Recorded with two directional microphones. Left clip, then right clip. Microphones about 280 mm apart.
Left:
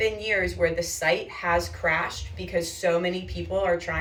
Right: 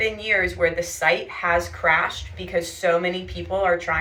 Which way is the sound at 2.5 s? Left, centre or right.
Centre.